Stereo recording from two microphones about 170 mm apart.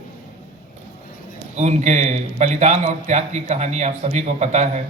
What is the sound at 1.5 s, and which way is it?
A man's voice, 45° right (ahead or behind).